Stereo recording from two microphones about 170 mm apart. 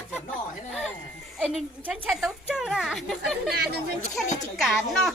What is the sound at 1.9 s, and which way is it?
A child's voice, centre (ahead or behind).